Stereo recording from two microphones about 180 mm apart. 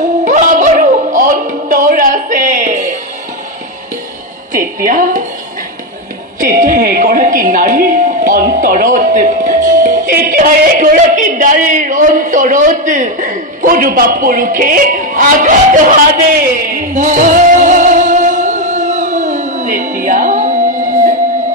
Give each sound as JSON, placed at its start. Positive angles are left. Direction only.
{"t": 0.2, "sound": "music", "side_deg": -45}
{"t": 4.5, "sound": "music", "side_deg": -50}
{"t": 6.4, "sound": "music", "side_deg": -50}